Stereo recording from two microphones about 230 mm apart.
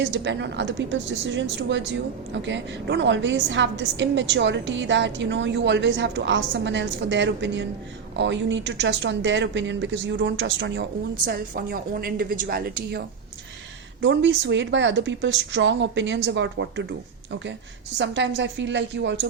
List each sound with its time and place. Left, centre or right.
0.0 s a woman's voice: right
11.3 s a woman's voice: right
17.9 s a woman's voice: right